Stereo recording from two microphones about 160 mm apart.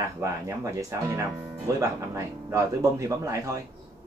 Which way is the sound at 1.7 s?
20° right (ahead or behind).